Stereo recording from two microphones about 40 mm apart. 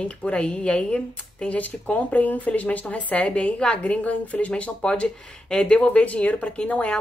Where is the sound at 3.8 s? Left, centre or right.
Left.